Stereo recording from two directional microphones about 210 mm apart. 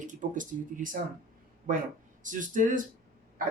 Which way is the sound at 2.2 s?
40° right (ahead or behind).